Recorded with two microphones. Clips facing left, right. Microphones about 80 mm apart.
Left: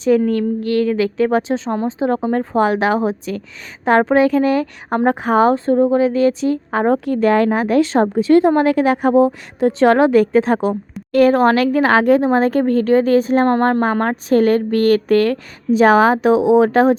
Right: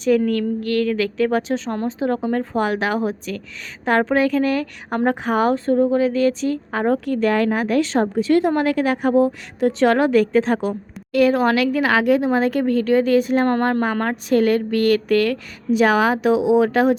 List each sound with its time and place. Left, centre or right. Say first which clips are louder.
0.3 s a woman's voice: left 3 dB; left
1.7 s a woman's voice: left 4 dB; centre
2.0 s a woman's voice: left 3 dB; left